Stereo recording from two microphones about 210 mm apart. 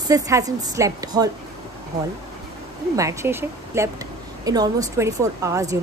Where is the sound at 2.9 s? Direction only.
15° right (ahead or behind).